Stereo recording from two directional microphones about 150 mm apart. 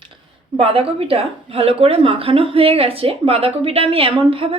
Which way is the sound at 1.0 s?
40° right (ahead or behind).